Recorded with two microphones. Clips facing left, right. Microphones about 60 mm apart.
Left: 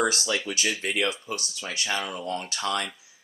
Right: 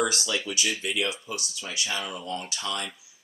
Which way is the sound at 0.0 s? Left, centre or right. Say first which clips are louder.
Left 2 dB; left.